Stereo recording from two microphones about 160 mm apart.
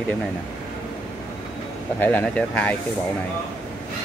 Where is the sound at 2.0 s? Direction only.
10° left (ahead or behind).